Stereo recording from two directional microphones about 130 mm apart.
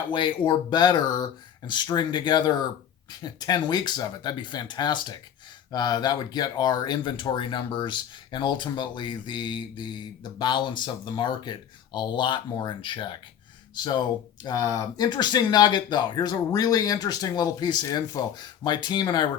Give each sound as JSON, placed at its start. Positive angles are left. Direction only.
{"t": 0.1, "sound": "speech", "side_deg": 35}